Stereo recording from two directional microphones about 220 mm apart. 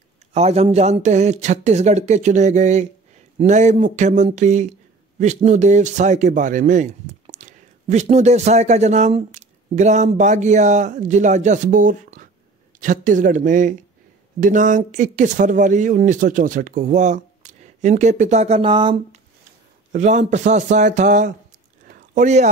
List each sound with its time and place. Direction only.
0.3 s speech: 30° right (ahead or behind)
19.9 s speech: 30° right (ahead or behind)
21.8 s a sound: 35° right (ahead or behind)